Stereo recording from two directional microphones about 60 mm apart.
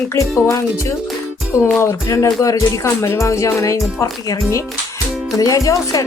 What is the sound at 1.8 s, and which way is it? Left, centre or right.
Speech, left.